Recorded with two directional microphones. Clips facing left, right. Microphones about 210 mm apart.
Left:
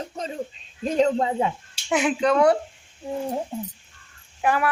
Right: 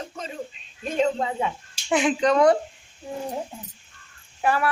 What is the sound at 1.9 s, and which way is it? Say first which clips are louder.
Speech: even; 5° left (ahead or behind).